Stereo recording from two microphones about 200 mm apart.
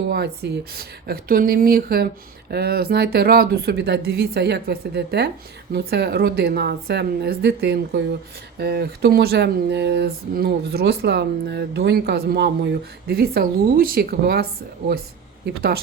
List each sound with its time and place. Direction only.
0.1 s speech: 55° right (ahead or behind)
15.4 s speech: 50° right (ahead or behind)